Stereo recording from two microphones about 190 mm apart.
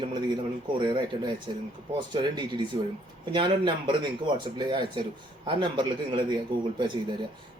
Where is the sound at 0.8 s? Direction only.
25° right (ahead or behind).